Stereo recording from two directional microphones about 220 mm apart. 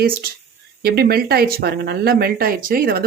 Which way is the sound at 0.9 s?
45° right (ahead or behind).